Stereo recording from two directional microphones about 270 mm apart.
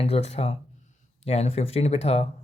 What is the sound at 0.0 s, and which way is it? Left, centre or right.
Speech, left.